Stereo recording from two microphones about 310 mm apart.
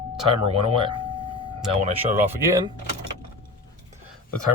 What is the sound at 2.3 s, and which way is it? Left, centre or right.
Speech, centre.